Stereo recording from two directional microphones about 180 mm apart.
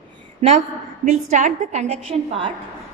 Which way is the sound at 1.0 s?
40° right (ahead or behind).